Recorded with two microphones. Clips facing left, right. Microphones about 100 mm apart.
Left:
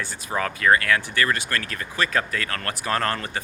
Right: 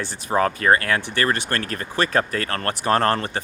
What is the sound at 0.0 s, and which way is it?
Speech, 30° right (ahead or behind).